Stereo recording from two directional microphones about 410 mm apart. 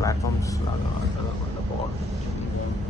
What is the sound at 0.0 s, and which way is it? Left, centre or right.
Vehicle, centre.